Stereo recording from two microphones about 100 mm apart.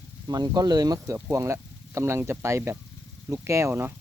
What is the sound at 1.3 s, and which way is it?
Speech, 30° right (ahead or behind).